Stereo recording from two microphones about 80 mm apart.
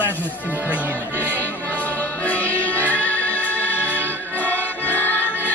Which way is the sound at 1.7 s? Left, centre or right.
Left.